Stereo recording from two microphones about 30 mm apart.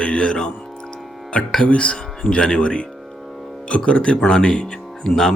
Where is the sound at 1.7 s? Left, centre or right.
Left.